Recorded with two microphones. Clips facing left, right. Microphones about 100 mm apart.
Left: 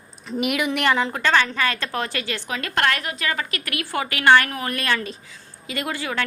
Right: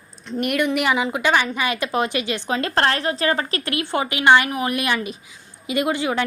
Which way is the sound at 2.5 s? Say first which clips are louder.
Right 3 dB; 30° right (ahead or behind).